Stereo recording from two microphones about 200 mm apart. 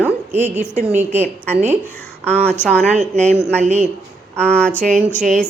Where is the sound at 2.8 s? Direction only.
35° right (ahead or behind).